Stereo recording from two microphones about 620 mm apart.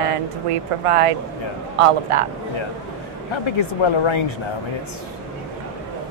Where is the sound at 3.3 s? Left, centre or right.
Left.